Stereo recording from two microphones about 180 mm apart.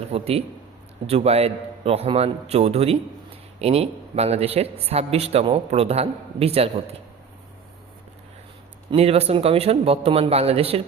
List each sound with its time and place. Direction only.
0.1 s a man's voice: 35° right (ahead or behind)
8.9 s a man's voice: 35° right (ahead or behind)